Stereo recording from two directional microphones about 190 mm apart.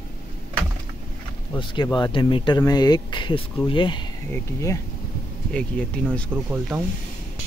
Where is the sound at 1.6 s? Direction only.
25° left (ahead or behind).